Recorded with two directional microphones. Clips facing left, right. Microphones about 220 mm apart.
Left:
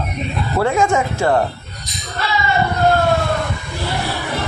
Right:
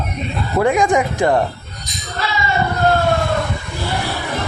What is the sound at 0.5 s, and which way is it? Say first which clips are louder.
Speech: right 2 dB; 15° right (ahead or behind).